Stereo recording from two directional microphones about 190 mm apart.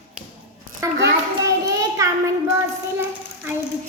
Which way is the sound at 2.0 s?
15° right (ahead or behind).